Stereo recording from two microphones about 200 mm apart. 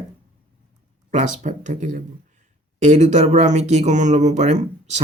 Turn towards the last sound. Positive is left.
turn(degrees=-35)  # may be behind; listen again after turning